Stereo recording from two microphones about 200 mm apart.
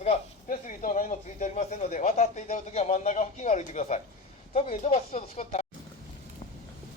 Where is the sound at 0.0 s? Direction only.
40° left (ahead or behind).